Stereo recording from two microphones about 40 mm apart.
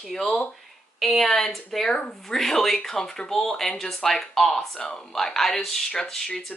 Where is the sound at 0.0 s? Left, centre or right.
Centre.